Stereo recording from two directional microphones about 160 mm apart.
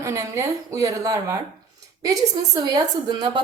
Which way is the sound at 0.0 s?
20° right (ahead or behind).